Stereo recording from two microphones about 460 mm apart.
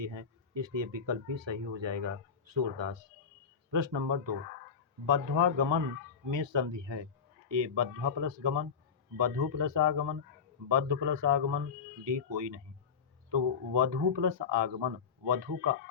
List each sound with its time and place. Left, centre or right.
0.0 s speech: right